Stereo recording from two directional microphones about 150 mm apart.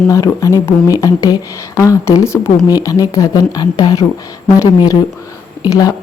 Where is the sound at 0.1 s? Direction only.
20° left (ahead or behind).